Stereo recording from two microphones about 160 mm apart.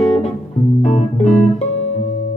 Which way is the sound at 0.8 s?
45° left (ahead or behind).